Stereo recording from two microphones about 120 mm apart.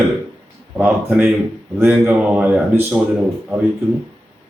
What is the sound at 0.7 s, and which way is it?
Speech, 10° right (ahead or behind).